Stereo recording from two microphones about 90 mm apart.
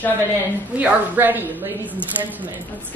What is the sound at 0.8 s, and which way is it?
Speech, 20° right (ahead or behind).